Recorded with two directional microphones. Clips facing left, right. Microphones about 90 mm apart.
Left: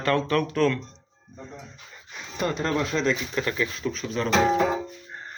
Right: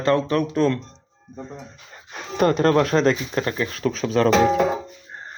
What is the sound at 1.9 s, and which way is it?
Speech, 60° right (ahead or behind).